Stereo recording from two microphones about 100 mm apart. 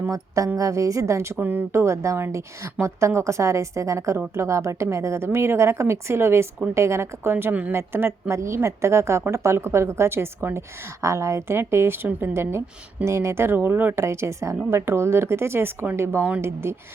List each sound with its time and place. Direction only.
0.1 s a woman's voice: 35° right (ahead or behind)